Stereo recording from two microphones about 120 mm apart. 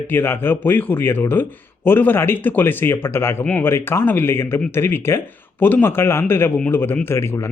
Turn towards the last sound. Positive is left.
turn(degrees=20)  # may be behind; listen again after turning